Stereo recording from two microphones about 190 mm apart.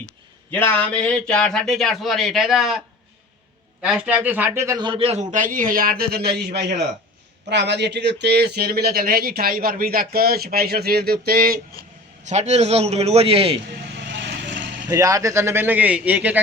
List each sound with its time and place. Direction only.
0.5 s a man's voice: 10° left (ahead or behind); by 11.6 s 50° right (ahead or behind)
12.3 s a man's voice: 35° right (ahead or behind)
14.1 s vehicle: 65° right (ahead or behind)
14.8 s speech: 15° right (ahead or behind)